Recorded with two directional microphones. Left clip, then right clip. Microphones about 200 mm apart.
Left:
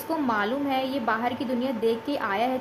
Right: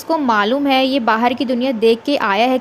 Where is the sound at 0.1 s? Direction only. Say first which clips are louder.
Right 11 dB; 40° right (ahead or behind).